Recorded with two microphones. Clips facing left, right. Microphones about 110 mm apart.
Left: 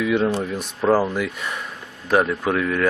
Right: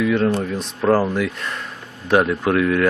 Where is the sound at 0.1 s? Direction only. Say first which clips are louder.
Right 2 dB; 10° left (ahead or behind).